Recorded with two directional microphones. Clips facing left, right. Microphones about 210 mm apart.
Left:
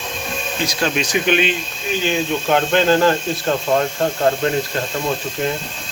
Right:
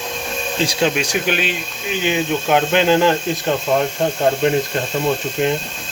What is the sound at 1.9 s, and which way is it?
Speech, 15° right (ahead or behind).